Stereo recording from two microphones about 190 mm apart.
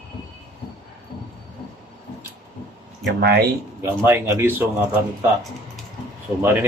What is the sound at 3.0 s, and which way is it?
Speech, 55° right (ahead or behind).